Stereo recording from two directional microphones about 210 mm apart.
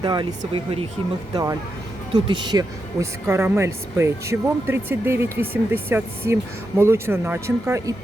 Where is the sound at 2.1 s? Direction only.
20° right (ahead or behind).